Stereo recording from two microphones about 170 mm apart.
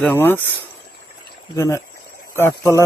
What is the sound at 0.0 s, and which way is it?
Speech, 10° left (ahead or behind).